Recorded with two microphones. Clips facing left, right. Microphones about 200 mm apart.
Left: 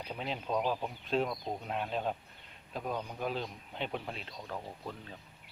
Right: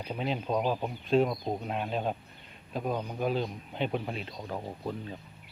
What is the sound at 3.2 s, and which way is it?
A man's voice, 5° right (ahead or behind).